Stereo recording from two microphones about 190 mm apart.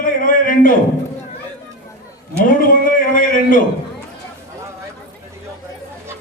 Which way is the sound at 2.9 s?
45° left (ahead or behind).